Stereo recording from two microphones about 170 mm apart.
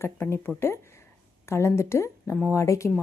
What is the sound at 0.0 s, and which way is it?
A woman's voice, 15° left (ahead or behind).